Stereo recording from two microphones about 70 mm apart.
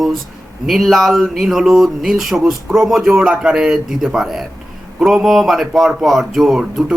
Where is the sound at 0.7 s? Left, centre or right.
Centre.